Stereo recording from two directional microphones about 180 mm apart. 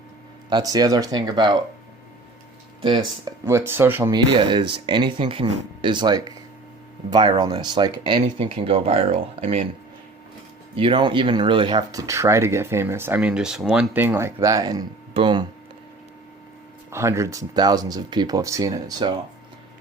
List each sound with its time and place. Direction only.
0.5 s speech: 20° right (ahead or behind)
3.2 s speech: 15° right (ahead or behind)
4.1 s speech: 25° right (ahead or behind)
10.8 s speech: 25° right (ahead or behind)
16.9 s speech: 15° right (ahead or behind)